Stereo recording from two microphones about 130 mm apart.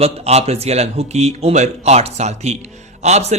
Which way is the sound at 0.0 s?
55° right (ahead or behind).